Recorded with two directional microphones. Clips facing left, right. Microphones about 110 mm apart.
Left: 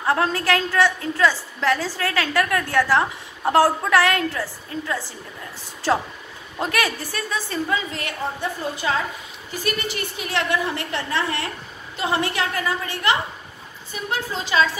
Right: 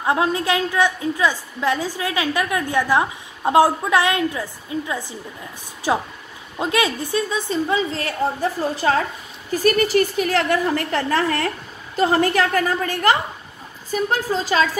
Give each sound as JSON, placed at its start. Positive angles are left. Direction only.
{"t": 0.0, "sound": "a woman's voice", "side_deg": -15}